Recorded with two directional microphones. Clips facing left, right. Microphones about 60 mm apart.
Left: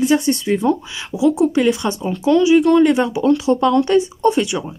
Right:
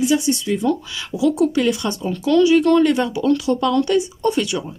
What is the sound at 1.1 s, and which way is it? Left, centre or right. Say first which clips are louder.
Speech: left 2 dB; left.